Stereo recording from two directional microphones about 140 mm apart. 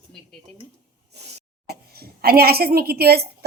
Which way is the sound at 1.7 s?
90° right.